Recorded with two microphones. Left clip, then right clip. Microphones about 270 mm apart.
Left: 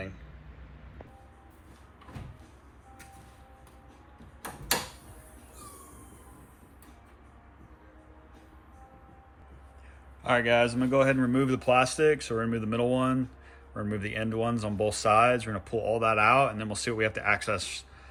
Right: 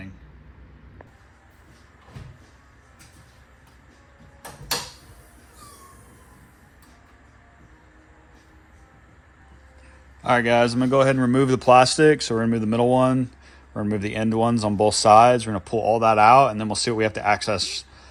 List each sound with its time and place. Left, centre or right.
10.2 s speech: centre